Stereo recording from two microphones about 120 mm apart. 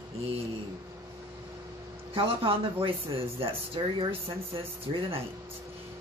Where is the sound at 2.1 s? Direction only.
50° right (ahead or behind).